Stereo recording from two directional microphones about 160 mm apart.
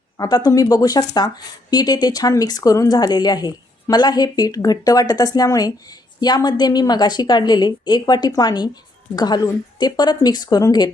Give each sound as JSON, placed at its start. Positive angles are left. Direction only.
{"t": 0.2, "sound": "a woman's voice", "side_deg": 25}